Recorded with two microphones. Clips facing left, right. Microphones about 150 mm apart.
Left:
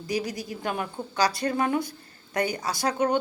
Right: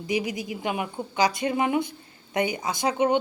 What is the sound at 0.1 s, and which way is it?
A woman's voice, 20° right (ahead or behind).